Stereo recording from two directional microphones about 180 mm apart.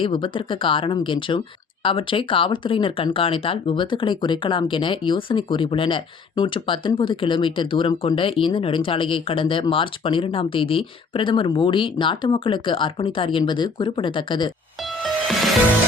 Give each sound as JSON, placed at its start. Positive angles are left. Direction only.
{"t": 0.0, "sound": "speech", "side_deg": 25}
{"t": 15.0, "sound": "music", "side_deg": 0}